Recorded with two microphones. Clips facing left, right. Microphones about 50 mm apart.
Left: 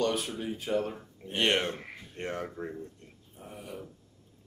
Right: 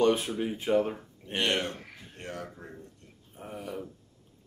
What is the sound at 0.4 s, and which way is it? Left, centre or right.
Speech, centre.